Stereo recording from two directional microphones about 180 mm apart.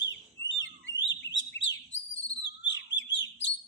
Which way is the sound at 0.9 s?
20° left (ahead or behind).